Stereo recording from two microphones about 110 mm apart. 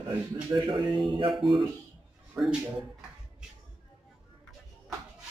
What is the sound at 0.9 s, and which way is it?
Speech, centre (ahead or behind).